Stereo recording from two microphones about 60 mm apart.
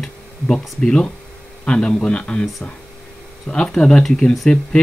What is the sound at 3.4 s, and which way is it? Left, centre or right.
Speech, centre.